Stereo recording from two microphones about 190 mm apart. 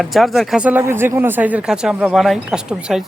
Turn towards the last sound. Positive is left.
turn(degrees=-5)  # may be behind; listen again after turning